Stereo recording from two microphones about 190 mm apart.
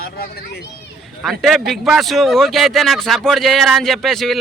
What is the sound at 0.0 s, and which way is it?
Speech, 55° left (ahead or behind).